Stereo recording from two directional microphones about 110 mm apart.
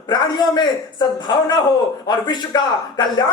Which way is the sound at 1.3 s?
35° left (ahead or behind).